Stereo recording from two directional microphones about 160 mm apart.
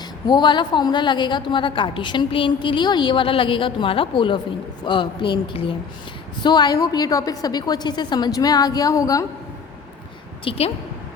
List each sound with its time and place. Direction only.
0.3 s a woman's voice: 30° left (ahead or behind)
10.5 s speech: 35° left (ahead or behind)